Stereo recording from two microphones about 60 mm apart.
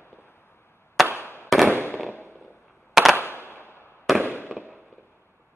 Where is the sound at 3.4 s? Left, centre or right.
Left.